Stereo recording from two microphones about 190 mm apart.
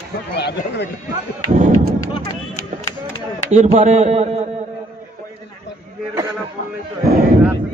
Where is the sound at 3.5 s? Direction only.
35° right (ahead or behind).